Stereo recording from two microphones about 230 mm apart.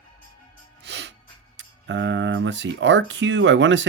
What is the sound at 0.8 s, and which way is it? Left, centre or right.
Music, right.